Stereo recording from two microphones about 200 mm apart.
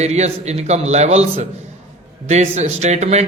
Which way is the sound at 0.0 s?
35° right (ahead or behind).